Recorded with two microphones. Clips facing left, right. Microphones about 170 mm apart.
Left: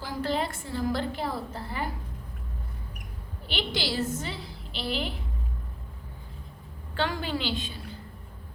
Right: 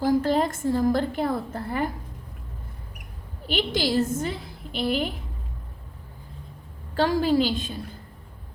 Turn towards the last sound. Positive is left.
turn(degrees=-45)  # may be behind; listen again after turning